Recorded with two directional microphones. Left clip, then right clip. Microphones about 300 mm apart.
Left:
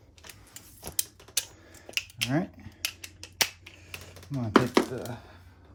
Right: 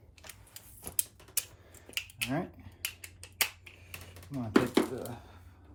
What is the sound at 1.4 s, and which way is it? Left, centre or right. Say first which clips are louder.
Tick-tock: left 7 dB; left.